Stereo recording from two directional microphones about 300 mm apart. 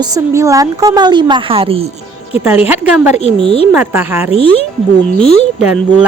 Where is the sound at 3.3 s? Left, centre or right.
Centre.